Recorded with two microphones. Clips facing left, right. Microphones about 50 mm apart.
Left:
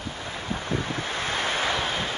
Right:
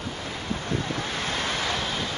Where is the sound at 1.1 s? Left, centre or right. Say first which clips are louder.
Left 4 dB; left.